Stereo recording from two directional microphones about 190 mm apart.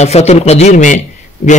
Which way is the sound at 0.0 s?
35° left (ahead or behind).